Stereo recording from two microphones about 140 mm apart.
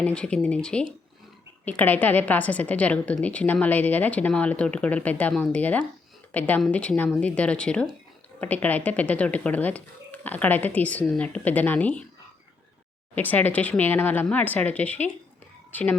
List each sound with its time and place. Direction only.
0.0 s speech: 5° left (ahead or behind)
13.1 s speech: 15° left (ahead or behind)